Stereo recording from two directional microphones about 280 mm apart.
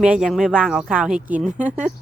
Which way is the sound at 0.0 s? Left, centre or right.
Centre.